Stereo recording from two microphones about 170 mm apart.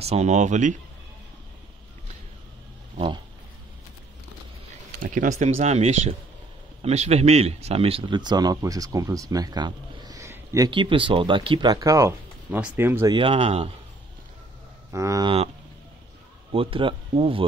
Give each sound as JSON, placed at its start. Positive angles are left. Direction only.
{"t": 0.0, "sound": "speech", "side_deg": -40}
{"t": 5.0, "sound": "speech", "side_deg": -50}
{"t": 10.7, "sound": "speech", "side_deg": -30}
{"t": 13.1, "sound": "speech", "side_deg": -30}
{"t": 14.9, "sound": "speech", "side_deg": -20}
{"t": 16.5, "sound": "speech", "side_deg": -30}